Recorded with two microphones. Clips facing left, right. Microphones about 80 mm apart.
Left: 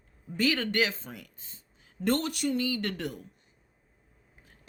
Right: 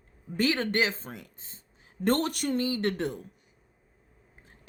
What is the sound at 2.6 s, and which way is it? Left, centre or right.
Speech, right.